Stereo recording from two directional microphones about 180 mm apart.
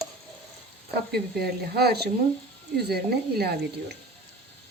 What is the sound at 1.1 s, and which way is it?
A woman's voice, 60° right (ahead or behind).